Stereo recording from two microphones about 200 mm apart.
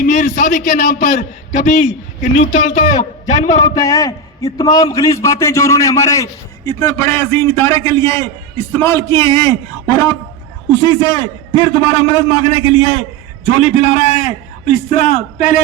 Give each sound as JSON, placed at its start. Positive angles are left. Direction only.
{"t": 0.0, "sound": "a man's voice", "side_deg": 40}
{"t": 3.8, "sound": "a man's voice", "side_deg": 15}